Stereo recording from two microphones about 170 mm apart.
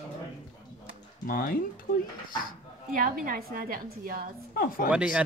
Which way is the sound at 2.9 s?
55° right (ahead or behind).